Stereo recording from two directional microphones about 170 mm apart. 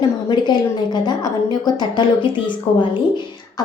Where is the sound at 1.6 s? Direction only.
25° left (ahead or behind).